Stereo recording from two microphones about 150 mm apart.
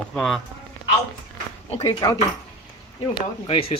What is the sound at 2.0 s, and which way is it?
Speech, 25° left (ahead or behind).